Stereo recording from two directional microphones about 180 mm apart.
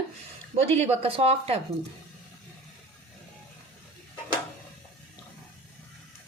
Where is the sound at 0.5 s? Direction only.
35° right (ahead or behind).